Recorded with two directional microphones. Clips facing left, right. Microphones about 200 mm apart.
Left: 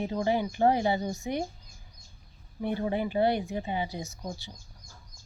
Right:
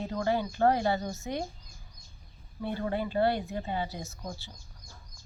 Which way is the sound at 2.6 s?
15° left (ahead or behind).